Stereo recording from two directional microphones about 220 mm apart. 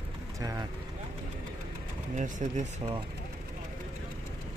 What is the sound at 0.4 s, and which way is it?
Vehicle, 15° right (ahead or behind).